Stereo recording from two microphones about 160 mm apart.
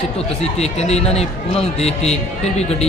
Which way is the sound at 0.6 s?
40° left (ahead or behind).